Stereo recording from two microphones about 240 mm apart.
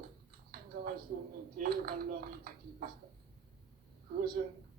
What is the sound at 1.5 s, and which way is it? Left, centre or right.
Speech, right.